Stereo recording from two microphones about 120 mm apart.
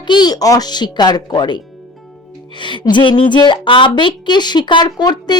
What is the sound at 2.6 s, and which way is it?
A woman's voice, 40° left (ahead or behind).